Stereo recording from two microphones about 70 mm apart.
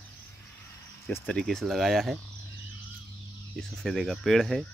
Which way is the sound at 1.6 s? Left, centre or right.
Centre.